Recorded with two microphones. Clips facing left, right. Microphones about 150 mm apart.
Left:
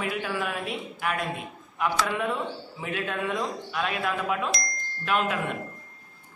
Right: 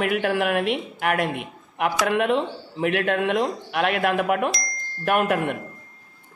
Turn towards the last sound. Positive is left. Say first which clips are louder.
# right 6 dB
turn(degrees=-60)  # may be behind; listen again after turning